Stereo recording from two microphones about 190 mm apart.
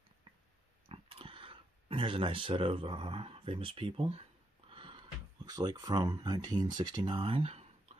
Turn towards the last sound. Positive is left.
turn(degrees=-30)  # may be behind; listen again after turning